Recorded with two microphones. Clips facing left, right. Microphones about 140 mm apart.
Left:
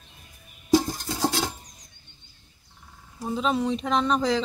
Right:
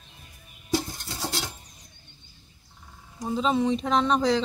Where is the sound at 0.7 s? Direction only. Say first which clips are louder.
Left 6 dB; 90° left.